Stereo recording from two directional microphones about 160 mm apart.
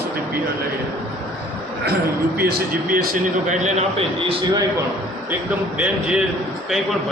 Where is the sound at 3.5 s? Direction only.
45° right (ahead or behind).